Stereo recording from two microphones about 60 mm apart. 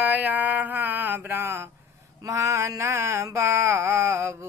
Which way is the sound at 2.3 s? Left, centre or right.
Right.